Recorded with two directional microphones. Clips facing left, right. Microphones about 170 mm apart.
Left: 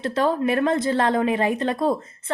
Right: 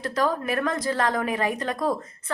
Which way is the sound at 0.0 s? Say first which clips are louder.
Left 4 dB; 25° left (ahead or behind).